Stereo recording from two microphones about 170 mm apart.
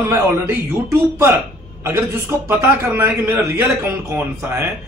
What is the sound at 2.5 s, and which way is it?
A man's voice, 15° right (ahead or behind).